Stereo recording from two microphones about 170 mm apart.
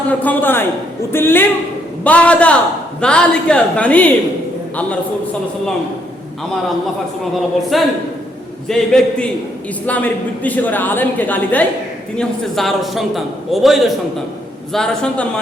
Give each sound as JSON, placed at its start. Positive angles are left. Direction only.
{"t": 0.1, "sound": "a woman's voice", "side_deg": 10}
{"t": 7.7, "sound": "a man's voice", "side_deg": 0}